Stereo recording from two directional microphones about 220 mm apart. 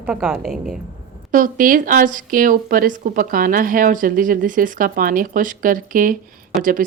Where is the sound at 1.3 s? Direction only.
40° right (ahead or behind).